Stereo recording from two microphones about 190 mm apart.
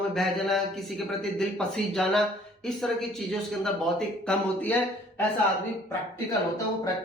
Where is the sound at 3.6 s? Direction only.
5° left (ahead or behind).